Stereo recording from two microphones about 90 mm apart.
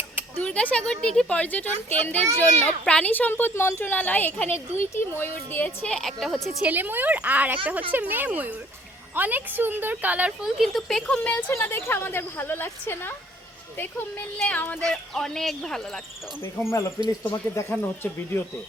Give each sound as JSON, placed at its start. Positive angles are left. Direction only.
{"t": 0.4, "sound": "a woman's voice", "side_deg": 15}
{"t": 5.5, "sound": "speech", "side_deg": 15}
{"t": 6.7, "sound": "speech", "side_deg": -20}
{"t": 10.6, "sound": "a woman's voice", "side_deg": 0}
{"t": 14.3, "sound": "speech", "side_deg": 15}
{"t": 14.8, "sound": "speech", "side_deg": 5}
{"t": 16.4, "sound": "a woman's voice", "side_deg": 30}